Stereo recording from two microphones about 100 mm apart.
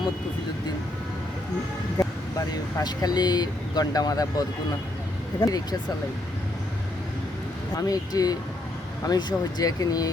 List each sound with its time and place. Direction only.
2.5 s speech: 40° left (ahead or behind)
7.8 s speech: 40° left (ahead or behind)